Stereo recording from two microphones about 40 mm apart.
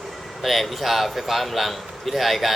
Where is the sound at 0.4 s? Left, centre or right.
Centre.